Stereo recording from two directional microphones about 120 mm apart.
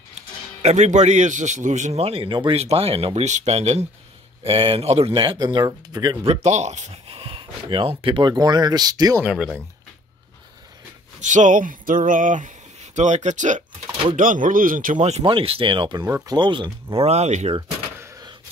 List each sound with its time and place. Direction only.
0.6 s a man's voice: 75° right (ahead or behind)
4.5 s speech: 50° right (ahead or behind)
5.4 s speech: 35° right (ahead or behind)
6.2 s speech: 60° right (ahead or behind); by 9.2 s 35° right (ahead or behind)
9.2 s speech: 10° right (ahead or behind)
11.1 s speech: 90° right
15.0 s a man's voice: 65° right (ahead or behind)
15.2 s speech: 50° right (ahead or behind); by 17.6 s 70° right (ahead or behind)